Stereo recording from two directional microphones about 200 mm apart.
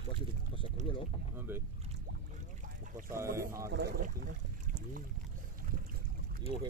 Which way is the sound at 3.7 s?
50° right (ahead or behind).